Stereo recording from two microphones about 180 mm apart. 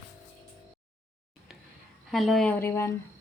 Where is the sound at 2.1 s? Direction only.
Centre (ahead or behind).